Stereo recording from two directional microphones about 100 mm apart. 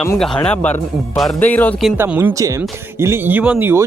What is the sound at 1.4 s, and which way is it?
Speech, 15° left (ahead or behind).